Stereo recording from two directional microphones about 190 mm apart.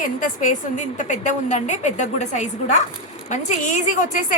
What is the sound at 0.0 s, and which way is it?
A woman's voice, 45° left (ahead or behind).